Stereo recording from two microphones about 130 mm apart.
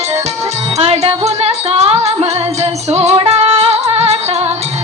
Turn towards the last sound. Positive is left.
turn(degrees=-55)  # may be behind; listen again after turning